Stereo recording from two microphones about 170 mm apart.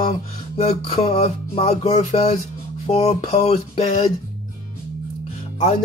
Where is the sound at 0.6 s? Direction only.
35° left (ahead or behind).